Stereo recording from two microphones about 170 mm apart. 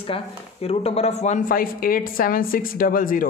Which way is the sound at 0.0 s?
35° left (ahead or behind).